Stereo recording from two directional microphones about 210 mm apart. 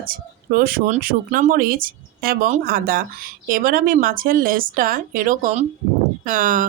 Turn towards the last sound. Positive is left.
turn(degrees=-40)  # may be behind; listen again after turning